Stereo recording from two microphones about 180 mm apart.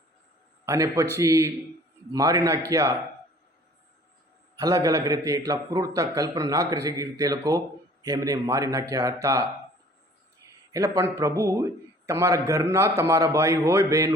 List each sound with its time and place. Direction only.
0.6 s a man's voice: 15° right (ahead or behind)
4.5 s a man's voice: 20° right (ahead or behind)
10.7 s a man's voice: 20° right (ahead or behind)